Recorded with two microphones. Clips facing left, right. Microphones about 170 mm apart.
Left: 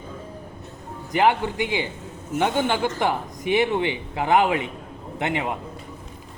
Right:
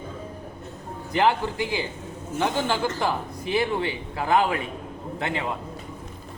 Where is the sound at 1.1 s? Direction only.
20° left (ahead or behind).